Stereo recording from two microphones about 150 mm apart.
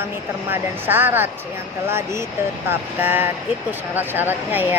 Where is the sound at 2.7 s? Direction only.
15° right (ahead or behind).